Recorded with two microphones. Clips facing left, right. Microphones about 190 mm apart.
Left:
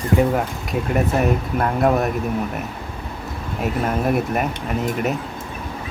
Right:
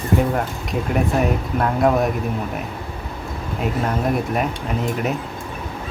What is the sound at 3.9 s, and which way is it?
Speech, 5° left (ahead or behind).